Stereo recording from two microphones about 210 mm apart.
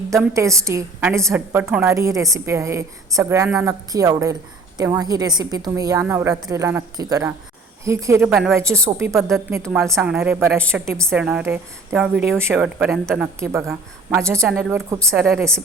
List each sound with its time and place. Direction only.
0.1 s a woman's voice: 15° right (ahead or behind)